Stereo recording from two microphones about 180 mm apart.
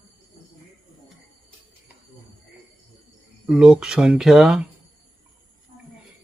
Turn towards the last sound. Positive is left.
turn(degrees=-5)  # may be behind; listen again after turning